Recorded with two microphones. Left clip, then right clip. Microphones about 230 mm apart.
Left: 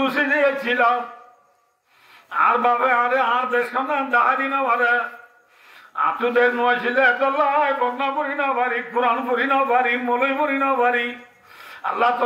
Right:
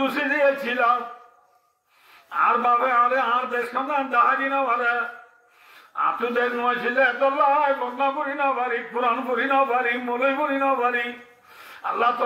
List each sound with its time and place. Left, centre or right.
0.0 s a man's voice: left
2.2 s a man's voice: left
11.6 s a sound: left